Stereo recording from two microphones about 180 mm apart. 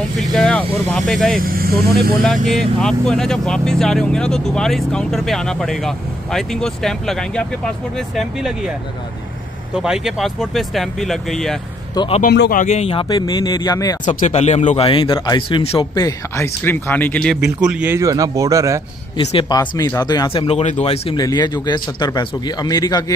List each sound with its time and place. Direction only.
0.2 s speech: 5° left (ahead or behind)
1.4 s speech: 55° right (ahead or behind)
2.2 s speech: centre (ahead or behind)
9.8 s speech: 5° right (ahead or behind)
11.9 s a man's voice: 25° left (ahead or behind)
12.2 s speech: 55° left (ahead or behind); by 13.0 s 35° left (ahead or behind)
13.1 s speech: 20° left (ahead or behind)
14.0 s speech: 40° left (ahead or behind)
14.9 s speech: 30° left (ahead or behind)
16.0 s speech: 15° left (ahead or behind)
17.6 s speech: 5° right (ahead or behind)
19.1 s speech: 25° left (ahead or behind)
20.4 s speech: 35° left (ahead or behind)
21.2 s speech: 25° left (ahead or behind)